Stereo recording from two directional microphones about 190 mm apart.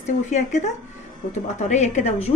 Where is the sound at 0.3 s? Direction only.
40° left (ahead or behind).